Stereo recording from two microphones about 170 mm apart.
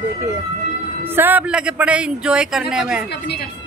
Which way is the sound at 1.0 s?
10° right (ahead or behind).